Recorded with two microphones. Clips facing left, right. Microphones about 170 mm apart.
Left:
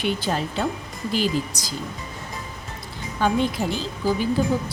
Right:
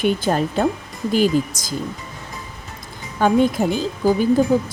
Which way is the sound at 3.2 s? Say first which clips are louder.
Right 6 dB; 50° right (ahead or behind).